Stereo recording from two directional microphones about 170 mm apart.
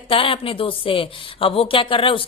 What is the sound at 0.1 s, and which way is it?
A woman's voice, 30° left (ahead or behind).